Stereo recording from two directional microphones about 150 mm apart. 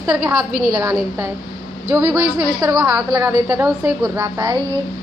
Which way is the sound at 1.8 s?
20° right (ahead or behind).